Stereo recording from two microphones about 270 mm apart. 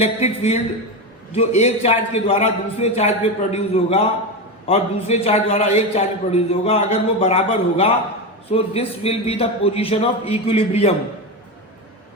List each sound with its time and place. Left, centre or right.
0.0 s a man's voice: left